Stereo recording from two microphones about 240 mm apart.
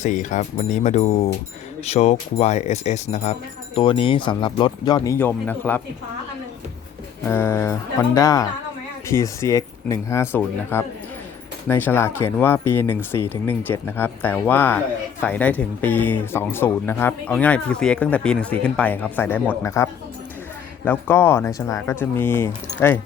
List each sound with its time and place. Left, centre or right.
0.0 s speech: left; by 5.8 s centre
7.3 s speech: centre